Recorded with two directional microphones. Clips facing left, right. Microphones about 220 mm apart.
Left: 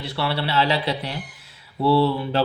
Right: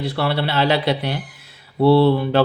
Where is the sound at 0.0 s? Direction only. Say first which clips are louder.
Right 4 dB; 55° right (ahead or behind).